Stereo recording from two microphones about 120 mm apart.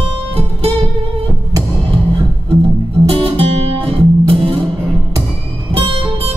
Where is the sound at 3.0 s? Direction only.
50° right (ahead or behind).